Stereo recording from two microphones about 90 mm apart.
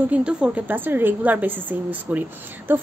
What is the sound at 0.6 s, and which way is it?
A woman's voice, 20° right (ahead or behind).